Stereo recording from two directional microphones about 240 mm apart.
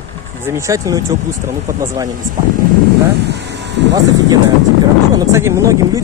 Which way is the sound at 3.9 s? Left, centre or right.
Centre.